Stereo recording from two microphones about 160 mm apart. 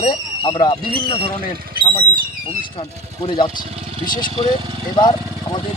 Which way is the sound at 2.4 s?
35° left (ahead or behind).